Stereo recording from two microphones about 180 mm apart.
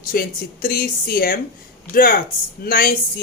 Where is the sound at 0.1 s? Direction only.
55° left (ahead or behind).